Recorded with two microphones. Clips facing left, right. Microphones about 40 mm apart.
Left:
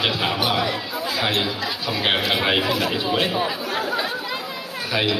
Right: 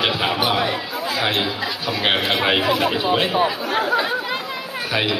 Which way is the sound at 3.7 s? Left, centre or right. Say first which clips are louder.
Right 5 dB; right.